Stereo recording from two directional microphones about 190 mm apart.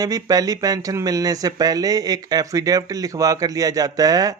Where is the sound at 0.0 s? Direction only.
20° right (ahead or behind).